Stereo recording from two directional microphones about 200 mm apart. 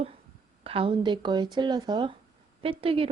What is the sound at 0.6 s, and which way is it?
A woman's voice, 25° right (ahead or behind).